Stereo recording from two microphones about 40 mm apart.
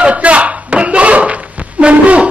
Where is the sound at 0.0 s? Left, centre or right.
Right.